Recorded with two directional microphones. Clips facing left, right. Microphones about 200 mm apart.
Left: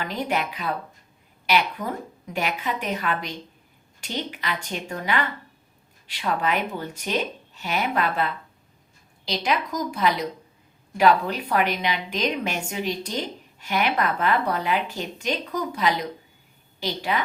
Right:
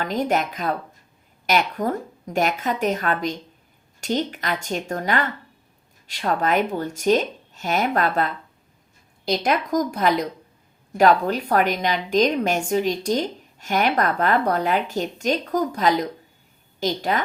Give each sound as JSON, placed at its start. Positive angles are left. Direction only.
{"t": 0.0, "sound": "a woman's voice", "side_deg": -45}